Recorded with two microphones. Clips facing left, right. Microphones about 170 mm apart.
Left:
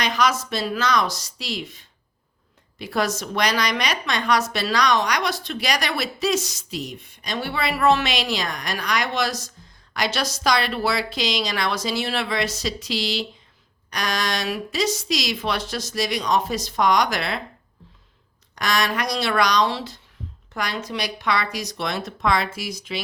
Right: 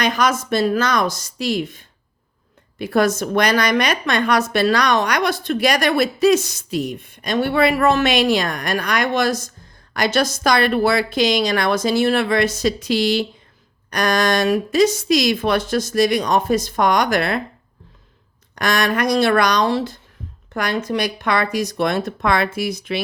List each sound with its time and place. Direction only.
0.0 s a woman's voice: 50° right (ahead or behind)
18.5 s a woman's voice: 50° right (ahead or behind)